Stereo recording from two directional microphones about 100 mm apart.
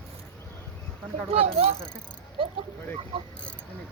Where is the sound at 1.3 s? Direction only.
80° right.